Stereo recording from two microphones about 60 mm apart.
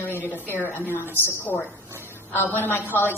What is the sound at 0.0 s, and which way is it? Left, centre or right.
A woman's voice, left.